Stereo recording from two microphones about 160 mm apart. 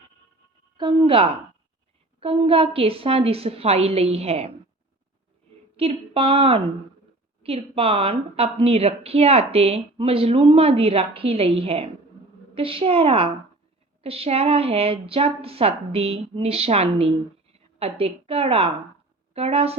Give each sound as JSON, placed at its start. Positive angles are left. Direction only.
{"t": 0.8, "sound": "a woman's voice", "side_deg": -30}
{"t": 5.7, "sound": "a woman's voice", "side_deg": -35}